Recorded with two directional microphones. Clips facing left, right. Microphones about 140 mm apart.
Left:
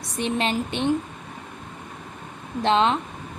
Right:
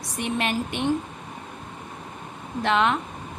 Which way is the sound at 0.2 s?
25° left (ahead or behind).